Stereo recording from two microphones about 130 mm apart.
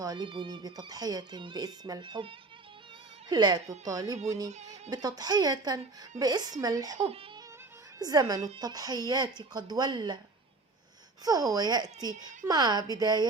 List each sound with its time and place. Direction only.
0.0 s a woman's voice: 30° right (ahead or behind)
4.4 s speech: 65° right (ahead or behind)
4.7 s a woman's voice: 30° right (ahead or behind)
11.3 s speech: 30° right (ahead or behind)